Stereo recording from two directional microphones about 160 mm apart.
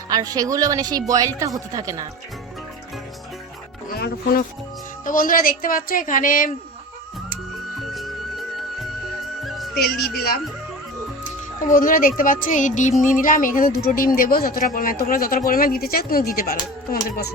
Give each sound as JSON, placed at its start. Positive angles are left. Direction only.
{"t": 0.1, "sound": "a woman's voice", "side_deg": -25}
{"t": 3.9, "sound": "speech", "side_deg": 75}
{"t": 5.0, "sound": "a man's voice", "side_deg": 60}
{"t": 7.8, "sound": "music", "side_deg": 0}
{"t": 9.7, "sound": "a woman's voice", "side_deg": 75}
{"t": 11.6, "sound": "a man's voice", "side_deg": 60}